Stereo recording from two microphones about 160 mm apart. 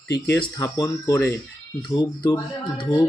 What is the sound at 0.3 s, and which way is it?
Speech, 20° left (ahead or behind).